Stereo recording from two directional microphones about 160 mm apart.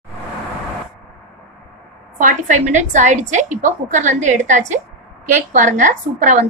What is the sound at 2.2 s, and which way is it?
A woman's voice, 50° right (ahead or behind).